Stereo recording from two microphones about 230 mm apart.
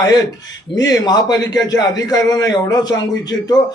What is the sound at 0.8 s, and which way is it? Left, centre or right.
A man's voice, centre.